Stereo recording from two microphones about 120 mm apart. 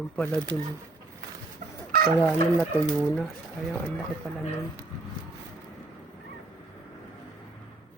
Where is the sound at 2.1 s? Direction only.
10° left (ahead or behind).